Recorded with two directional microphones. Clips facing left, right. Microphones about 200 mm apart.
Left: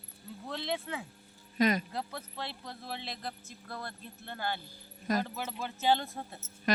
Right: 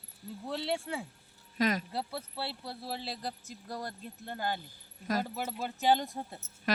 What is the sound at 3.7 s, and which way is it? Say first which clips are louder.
Speech: right 3 dB; 15° right (ahead or behind).